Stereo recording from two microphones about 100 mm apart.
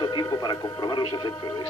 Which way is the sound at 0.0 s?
45° left (ahead or behind).